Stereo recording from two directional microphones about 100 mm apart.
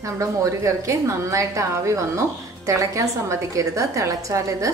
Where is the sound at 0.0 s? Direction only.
35° right (ahead or behind).